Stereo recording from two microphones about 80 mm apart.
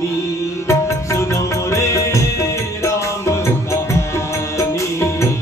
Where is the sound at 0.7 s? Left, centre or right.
Left.